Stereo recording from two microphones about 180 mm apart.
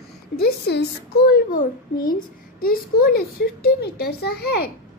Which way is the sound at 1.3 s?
50° left (ahead or behind).